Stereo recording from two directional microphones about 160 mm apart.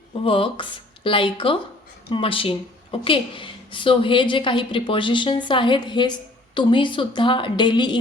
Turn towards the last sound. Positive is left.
turn(degrees=30)  # may be behind; listen again after turning